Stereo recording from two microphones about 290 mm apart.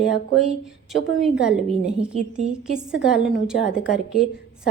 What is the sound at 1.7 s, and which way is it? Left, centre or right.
Speech, right.